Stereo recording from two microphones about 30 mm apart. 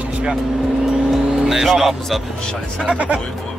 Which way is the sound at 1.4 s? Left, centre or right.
Centre.